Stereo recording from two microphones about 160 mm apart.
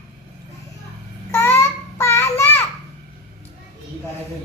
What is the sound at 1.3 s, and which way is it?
Child singing, 15° left (ahead or behind).